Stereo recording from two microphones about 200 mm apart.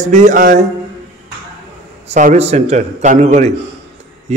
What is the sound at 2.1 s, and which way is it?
A man's voice, 35° right (ahead or behind).